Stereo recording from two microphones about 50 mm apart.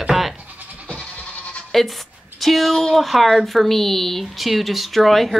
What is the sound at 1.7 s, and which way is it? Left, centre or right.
A woman's voice, centre.